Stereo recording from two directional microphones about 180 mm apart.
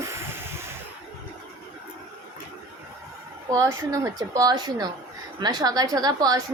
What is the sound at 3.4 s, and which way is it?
A woman's voice, 15° right (ahead or behind).